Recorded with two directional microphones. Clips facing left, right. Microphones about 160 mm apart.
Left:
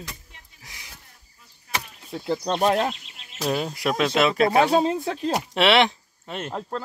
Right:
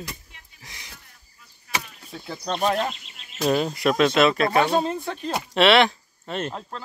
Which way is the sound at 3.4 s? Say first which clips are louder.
Right 4 dB; 5° left (ahead or behind).